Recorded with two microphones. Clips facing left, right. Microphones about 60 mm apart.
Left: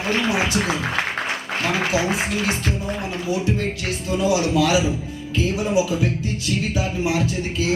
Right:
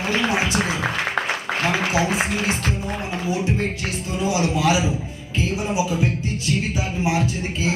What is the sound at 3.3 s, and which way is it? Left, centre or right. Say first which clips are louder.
Speech: left 1 dB; right.